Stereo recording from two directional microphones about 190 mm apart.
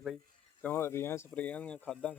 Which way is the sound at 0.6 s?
10° left (ahead or behind).